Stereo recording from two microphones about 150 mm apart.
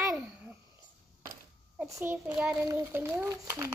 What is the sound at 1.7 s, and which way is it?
Speech, 20° right (ahead or behind).